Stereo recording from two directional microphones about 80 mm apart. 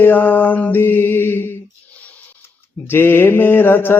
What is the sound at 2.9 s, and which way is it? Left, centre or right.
Mantra, left.